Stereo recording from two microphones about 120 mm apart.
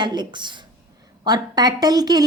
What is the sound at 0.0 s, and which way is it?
A woman's voice, 40° right (ahead or behind).